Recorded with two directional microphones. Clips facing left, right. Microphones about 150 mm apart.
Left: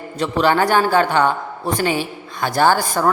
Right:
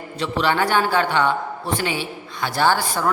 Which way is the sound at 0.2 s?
45° left (ahead or behind).